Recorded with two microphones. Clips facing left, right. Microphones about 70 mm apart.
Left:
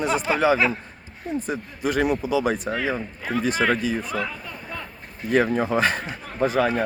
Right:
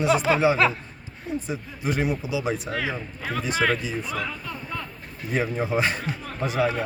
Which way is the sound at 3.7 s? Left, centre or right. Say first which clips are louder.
Left 3 dB; left.